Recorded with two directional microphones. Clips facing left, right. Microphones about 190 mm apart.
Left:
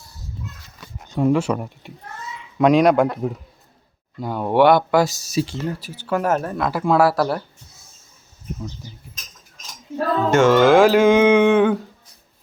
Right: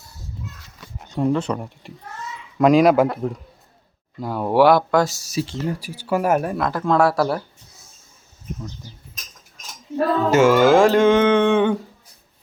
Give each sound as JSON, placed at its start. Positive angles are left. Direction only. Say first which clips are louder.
{"t": 1.2, "sound": "music", "louder": "left 2 dB", "side_deg": 10}
{"t": 5.0, "sound": "speech", "louder": "left 3 dB", "side_deg": 20}
{"t": 5.6, "sound": "speech", "louder": "right 1 dB", "side_deg": -10}
{"t": 6.6, "sound": "music", "louder": "left 1 dB", "side_deg": 5}
{"t": 10.2, "sound": "music", "louder": "left 1 dB", "side_deg": -5}